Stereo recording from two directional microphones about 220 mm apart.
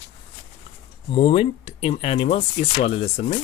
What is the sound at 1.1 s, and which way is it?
Speech, 25° left (ahead or behind).